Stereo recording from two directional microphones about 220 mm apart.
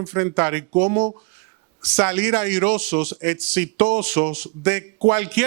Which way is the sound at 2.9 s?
35° right (ahead or behind).